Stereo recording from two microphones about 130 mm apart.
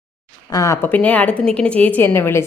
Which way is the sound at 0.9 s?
10° left (ahead or behind).